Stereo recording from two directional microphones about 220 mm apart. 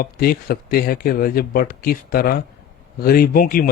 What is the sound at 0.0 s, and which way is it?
Speech, 45° left (ahead or behind).